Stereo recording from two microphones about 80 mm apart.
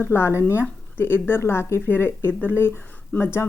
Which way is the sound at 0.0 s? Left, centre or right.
Left.